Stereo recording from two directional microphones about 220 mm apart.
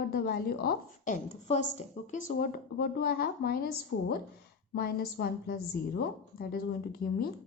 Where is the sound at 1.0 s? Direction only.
30° left (ahead or behind).